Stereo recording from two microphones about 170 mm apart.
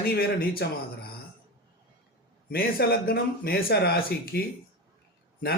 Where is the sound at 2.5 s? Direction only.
60° left (ahead or behind).